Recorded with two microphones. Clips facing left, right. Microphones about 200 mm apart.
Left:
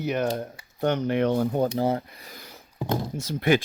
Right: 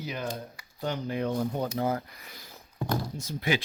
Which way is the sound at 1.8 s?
30° left (ahead or behind).